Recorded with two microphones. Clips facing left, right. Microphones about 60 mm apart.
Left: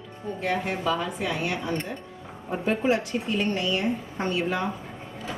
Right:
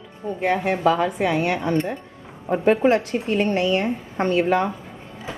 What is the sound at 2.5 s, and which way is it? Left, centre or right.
A woman's voice, right.